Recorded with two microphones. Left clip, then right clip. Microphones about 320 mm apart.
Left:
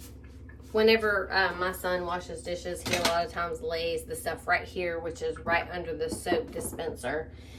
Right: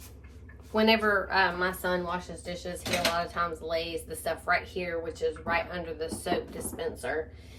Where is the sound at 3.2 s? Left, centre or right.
Centre.